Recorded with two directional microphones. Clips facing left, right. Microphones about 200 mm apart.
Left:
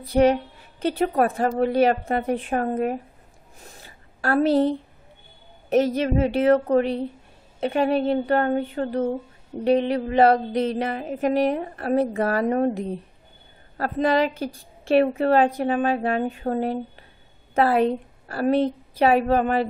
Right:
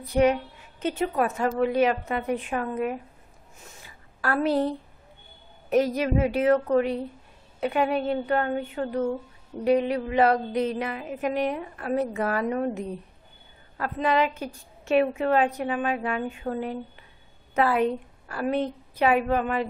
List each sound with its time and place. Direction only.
0.0 s a woman's voice: 30° left (ahead or behind)
2.0 s a woman's voice: 50° left (ahead or behind)
3.6 s a sound: 35° left (ahead or behind)
5.7 s a woman's voice: 25° left (ahead or behind)